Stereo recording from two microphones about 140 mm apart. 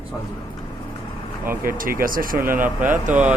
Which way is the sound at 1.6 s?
80° right.